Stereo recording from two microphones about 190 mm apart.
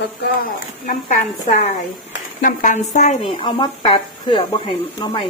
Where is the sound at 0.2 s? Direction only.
50° left (ahead or behind).